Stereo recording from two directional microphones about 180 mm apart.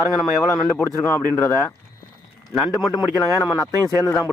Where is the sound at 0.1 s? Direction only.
Centre (ahead or behind).